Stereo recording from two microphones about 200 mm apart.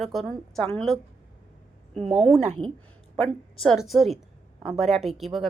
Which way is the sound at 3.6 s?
Centre (ahead or behind).